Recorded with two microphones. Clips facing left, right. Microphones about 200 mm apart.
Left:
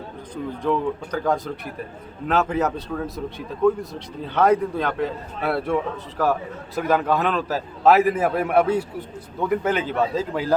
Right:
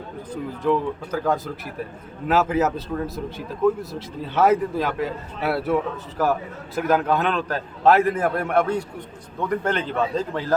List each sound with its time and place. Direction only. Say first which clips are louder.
0.6 s a man's voice: right 1 dB; 5° right (ahead or behind)